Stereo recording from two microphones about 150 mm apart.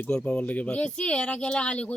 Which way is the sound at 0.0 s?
5° left (ahead or behind).